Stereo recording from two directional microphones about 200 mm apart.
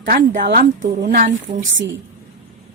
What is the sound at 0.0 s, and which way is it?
A woman's voice, 45° right (ahead or behind).